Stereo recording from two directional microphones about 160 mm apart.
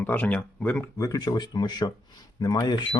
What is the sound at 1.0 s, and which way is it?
Speech, 25° left (ahead or behind).